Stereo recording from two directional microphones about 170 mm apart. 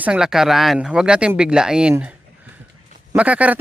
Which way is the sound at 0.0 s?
5° right (ahead or behind).